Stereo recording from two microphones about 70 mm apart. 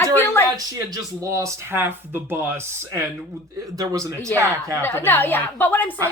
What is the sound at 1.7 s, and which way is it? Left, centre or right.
Speech, right.